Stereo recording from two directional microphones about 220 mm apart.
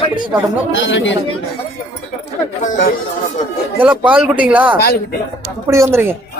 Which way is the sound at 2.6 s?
35° left (ahead or behind).